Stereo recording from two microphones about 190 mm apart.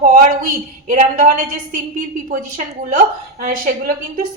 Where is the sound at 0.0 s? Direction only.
45° right (ahead or behind).